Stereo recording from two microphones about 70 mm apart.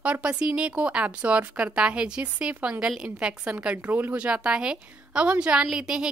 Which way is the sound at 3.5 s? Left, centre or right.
Right.